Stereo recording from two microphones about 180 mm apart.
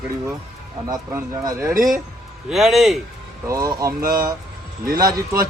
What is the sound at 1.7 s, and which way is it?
Speech, 50° right (ahead or behind).